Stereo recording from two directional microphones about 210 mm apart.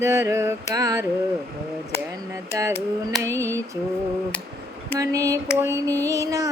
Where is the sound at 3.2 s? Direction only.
15° right (ahead or behind).